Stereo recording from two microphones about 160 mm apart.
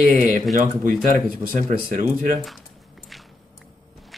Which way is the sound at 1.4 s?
55° right (ahead or behind).